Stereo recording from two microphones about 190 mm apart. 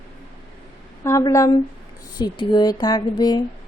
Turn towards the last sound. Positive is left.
turn(degrees=20)  # may be behind; listen again after turning